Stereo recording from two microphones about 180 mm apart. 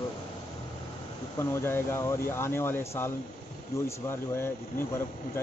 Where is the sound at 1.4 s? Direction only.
15° left (ahead or behind).